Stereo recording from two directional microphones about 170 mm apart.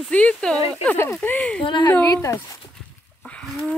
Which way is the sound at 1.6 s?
25° left (ahead or behind).